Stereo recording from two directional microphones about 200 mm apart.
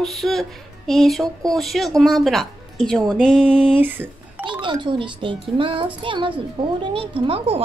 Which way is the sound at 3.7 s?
10° right (ahead or behind).